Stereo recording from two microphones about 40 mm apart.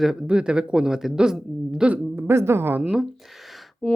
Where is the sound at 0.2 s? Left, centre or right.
Right.